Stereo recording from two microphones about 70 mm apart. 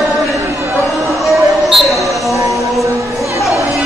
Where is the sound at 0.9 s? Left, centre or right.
Centre.